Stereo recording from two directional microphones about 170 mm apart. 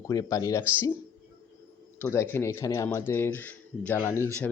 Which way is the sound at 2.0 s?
15° left (ahead or behind).